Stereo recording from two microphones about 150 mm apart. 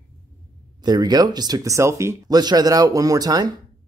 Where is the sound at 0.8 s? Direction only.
30° right (ahead or behind).